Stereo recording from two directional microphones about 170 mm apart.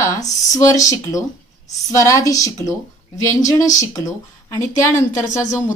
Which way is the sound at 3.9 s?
20° left (ahead or behind).